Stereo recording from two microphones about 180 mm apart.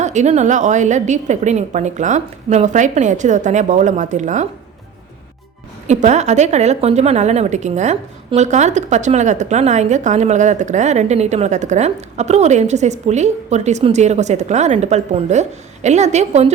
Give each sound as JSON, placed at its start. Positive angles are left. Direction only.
{"t": 0.0, "sound": "a woman's voice", "side_deg": -40}
{"t": 5.9, "sound": "a woman's voice", "side_deg": -40}